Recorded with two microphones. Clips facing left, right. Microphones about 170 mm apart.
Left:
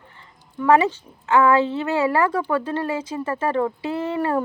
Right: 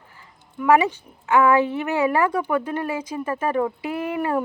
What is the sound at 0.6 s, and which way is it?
A woman's voice, 10° right (ahead or behind).